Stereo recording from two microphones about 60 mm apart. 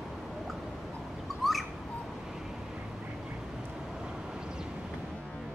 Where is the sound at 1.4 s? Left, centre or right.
Centre.